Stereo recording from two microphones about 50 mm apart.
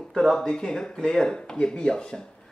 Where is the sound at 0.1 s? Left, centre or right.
Centre.